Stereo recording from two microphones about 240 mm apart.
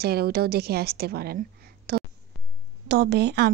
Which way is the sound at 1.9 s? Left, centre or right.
Right.